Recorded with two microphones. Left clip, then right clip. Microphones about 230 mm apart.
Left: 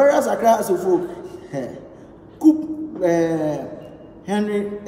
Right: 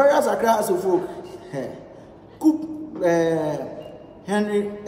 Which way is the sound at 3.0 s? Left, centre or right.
Centre.